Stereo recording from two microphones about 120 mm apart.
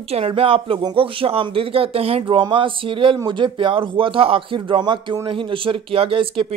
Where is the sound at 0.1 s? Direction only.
50° right (ahead or behind).